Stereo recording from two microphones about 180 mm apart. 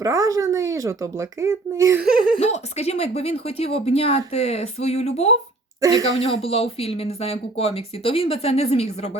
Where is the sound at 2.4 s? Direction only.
35° left (ahead or behind).